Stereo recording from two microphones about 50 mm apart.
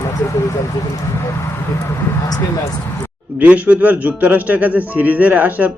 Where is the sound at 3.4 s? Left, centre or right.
Right.